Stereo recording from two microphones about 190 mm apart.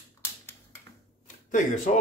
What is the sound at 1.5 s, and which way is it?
Speech, 40° left (ahead or behind).